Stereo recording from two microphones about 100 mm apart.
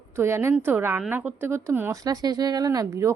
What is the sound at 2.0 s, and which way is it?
A woman's voice, 40° right (ahead or behind).